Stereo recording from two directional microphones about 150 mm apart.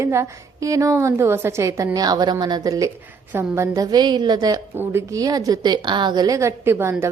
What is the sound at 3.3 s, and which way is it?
A woman's voice, 15° right (ahead or behind).